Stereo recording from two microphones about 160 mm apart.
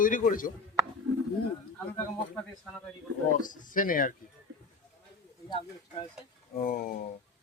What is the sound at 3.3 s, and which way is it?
Speech, 55° left (ahead or behind).